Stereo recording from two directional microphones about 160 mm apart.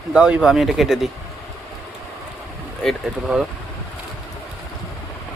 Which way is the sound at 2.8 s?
5° right (ahead or behind).